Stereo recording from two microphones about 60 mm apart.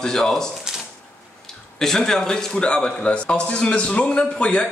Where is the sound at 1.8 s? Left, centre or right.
Centre.